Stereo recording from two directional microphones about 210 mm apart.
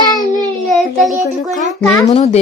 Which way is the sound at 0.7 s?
Centre (ahead or behind).